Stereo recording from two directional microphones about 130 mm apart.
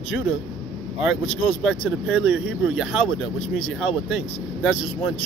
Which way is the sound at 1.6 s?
Centre (ahead or behind).